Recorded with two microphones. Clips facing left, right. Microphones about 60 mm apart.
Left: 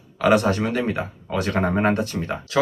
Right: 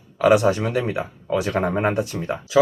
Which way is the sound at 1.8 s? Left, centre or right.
Centre.